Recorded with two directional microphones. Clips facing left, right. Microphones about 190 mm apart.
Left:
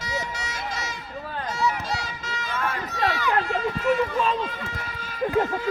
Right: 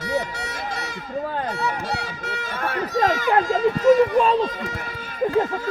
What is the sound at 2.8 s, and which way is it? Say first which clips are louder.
Speech: right 7 dB; 45° right (ahead or behind).